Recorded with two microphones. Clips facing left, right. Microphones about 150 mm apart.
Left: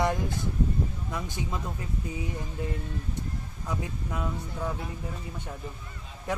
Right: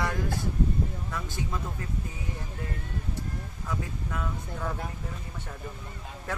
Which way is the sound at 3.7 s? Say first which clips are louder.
Left 1 dB; 20° left (ahead or behind).